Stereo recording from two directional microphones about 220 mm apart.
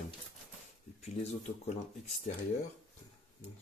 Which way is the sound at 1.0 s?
30° left (ahead or behind).